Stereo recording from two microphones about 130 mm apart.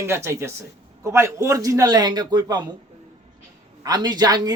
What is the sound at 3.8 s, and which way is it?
Speech, 30° right (ahead or behind).